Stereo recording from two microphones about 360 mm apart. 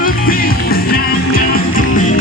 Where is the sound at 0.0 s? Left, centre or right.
Left.